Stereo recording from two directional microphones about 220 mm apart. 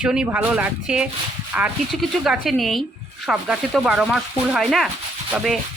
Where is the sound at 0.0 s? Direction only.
5° right (ahead or behind).